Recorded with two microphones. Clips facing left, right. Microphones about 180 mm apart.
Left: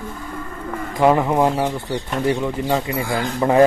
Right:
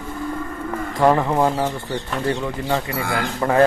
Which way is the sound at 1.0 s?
10° left (ahead or behind).